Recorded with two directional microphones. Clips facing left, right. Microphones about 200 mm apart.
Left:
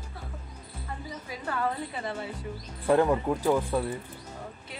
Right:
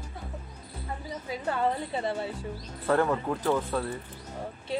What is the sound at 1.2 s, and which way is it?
A woman's voice, 25° right (ahead or behind).